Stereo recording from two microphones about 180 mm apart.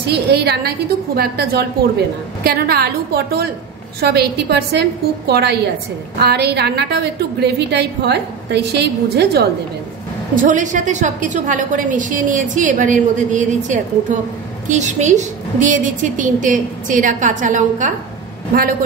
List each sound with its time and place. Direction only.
0.0 s a woman's voice: 65° right (ahead or behind)
10.3 s a woman's voice: 45° right (ahead or behind)